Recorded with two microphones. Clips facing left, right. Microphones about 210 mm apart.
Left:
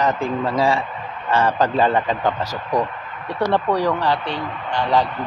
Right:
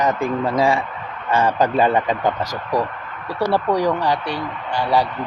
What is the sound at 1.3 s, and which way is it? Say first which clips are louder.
Speech: right 1 dB; 15° right (ahead or behind).